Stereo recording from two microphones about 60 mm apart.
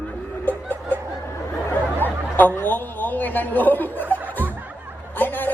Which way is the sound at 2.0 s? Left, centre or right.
Left.